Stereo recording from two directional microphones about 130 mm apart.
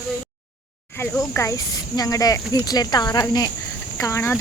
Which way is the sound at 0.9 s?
15° left (ahead or behind).